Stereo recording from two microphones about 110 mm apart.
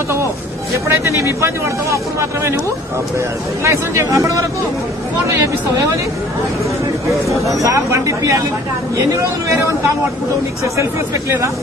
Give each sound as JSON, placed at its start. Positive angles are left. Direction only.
{"t": 0.8, "sound": "speech", "side_deg": -25}
{"t": 3.6, "sound": "speech", "side_deg": -25}
{"t": 7.5, "sound": "speech", "side_deg": -30}
{"t": 10.6, "sound": "speech", "side_deg": -25}